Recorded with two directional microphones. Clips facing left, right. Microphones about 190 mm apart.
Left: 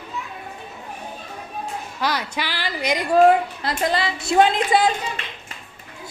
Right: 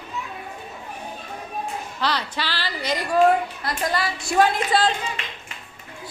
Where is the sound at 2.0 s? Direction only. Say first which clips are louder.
Left 1 dB; 10° left (ahead or behind).